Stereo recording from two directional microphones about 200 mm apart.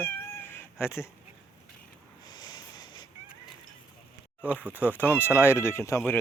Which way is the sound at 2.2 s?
20° left (ahead or behind).